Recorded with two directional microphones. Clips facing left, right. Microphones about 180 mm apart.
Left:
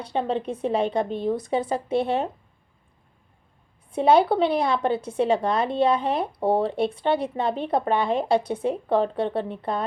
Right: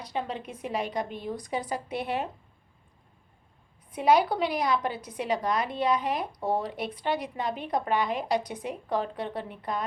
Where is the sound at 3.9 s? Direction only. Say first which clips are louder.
Left 5 dB; 30° left (ahead or behind).